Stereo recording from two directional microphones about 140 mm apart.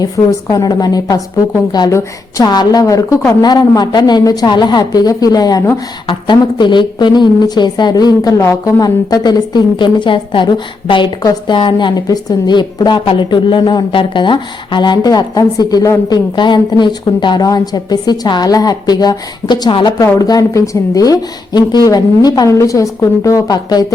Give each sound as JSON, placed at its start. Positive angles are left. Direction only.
{"t": 0.0, "sound": "a woman's voice", "side_deg": 25}